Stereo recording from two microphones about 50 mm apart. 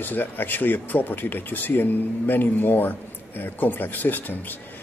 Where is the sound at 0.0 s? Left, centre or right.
Left.